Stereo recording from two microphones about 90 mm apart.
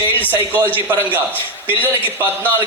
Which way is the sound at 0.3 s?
25° right (ahead or behind).